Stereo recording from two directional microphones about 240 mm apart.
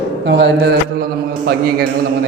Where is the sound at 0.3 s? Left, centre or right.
Right.